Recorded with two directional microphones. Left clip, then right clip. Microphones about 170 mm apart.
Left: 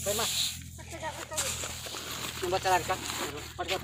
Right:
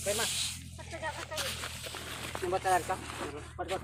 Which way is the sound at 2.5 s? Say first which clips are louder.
Left 2 dB; 5° right (ahead or behind).